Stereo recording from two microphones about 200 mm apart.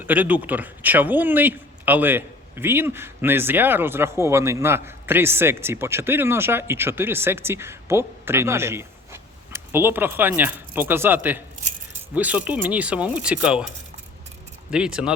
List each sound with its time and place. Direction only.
0.0 s speech: 10° right (ahead or behind)
14.7 s speech: 5° right (ahead or behind)